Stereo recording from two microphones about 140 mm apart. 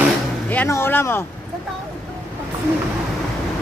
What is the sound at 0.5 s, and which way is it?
Speech, 15° left (ahead or behind).